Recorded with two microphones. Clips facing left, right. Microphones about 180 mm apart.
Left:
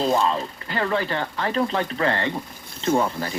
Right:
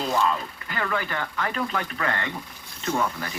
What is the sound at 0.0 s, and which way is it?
Speech, 30° left (ahead or behind).